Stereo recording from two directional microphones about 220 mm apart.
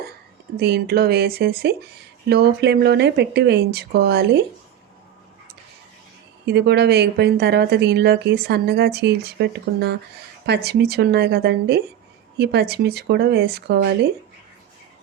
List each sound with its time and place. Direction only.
0.5 s a woman's voice: 45° right (ahead or behind)
6.4 s a woman's voice: 50° right (ahead or behind)